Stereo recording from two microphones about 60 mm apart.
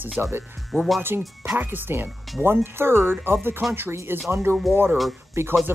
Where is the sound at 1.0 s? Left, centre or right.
Right.